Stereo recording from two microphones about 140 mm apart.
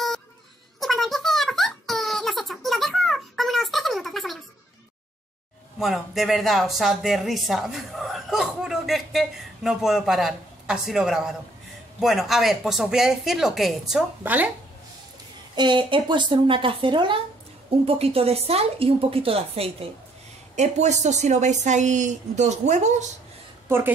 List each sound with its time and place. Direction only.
0.7 s a sound: centre (ahead or behind)
5.8 s speech: centre (ahead or behind)
14.2 s speech: 10° right (ahead or behind)
15.5 s a woman's voice: 35° right (ahead or behind)
20.5 s a woman's voice: 55° right (ahead or behind)